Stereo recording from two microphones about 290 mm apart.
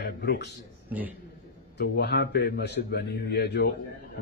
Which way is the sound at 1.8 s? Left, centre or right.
Left.